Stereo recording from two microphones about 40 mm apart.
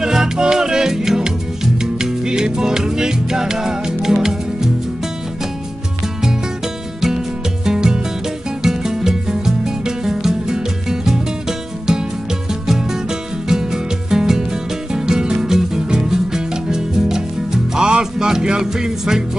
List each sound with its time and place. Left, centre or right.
0.0 s music: centre
7.6 s music: centre